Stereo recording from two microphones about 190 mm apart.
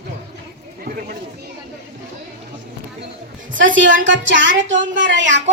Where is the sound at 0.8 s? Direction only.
55° right (ahead or behind).